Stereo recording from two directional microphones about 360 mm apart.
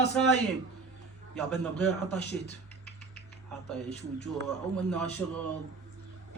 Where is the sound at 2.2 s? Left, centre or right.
Left.